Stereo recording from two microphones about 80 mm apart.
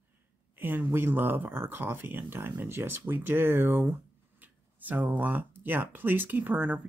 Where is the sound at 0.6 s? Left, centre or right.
Right.